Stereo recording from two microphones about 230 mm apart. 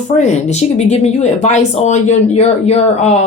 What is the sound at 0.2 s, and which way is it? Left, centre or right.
Speech, left.